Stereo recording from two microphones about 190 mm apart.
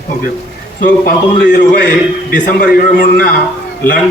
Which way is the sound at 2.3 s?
50° left (ahead or behind).